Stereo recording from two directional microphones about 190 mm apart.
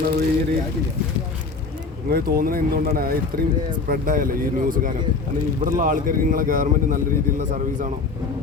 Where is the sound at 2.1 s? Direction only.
50° right (ahead or behind).